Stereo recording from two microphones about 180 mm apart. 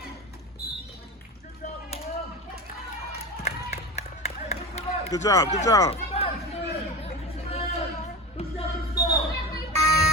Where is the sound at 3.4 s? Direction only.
35° left (ahead or behind).